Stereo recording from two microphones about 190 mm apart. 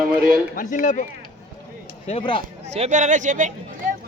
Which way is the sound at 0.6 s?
45° left (ahead or behind).